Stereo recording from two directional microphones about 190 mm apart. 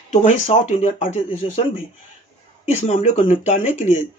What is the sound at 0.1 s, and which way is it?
Speech, 40° left (ahead or behind).